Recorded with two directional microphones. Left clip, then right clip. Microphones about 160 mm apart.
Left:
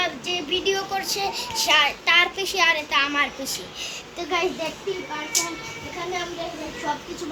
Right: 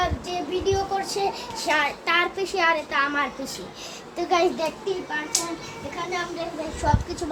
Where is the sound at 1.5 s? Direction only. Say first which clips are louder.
Left 5 dB; 65° right (ahead or behind).